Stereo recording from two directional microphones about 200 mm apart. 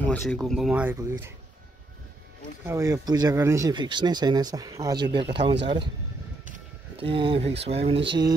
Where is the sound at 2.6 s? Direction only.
15° right (ahead or behind).